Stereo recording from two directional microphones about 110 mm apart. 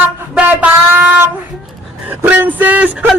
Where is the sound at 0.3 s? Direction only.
15° right (ahead or behind).